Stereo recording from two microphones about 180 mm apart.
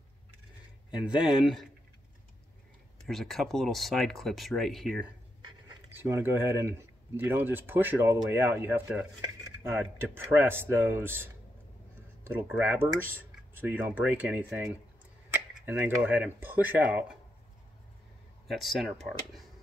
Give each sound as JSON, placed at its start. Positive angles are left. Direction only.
{"t": 0.9, "sound": "speech", "side_deg": -5}
{"t": 3.1, "sound": "speech", "side_deg": 0}
{"t": 5.9, "sound": "speech", "side_deg": -15}
{"t": 18.5, "sound": "speech", "side_deg": 0}